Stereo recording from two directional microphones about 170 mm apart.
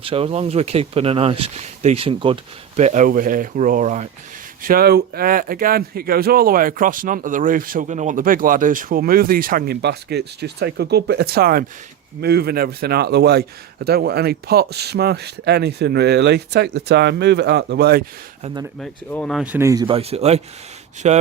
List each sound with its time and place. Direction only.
0.0 s speech: 35° right (ahead or behind)
4.6 s a man's voice: 60° right (ahead or behind); by 18.0 s 75° right (ahead or behind)
18.8 s speech: 5° left (ahead or behind)
19.5 s speech: 20° right (ahead or behind)
19.9 s speech: 35° right (ahead or behind)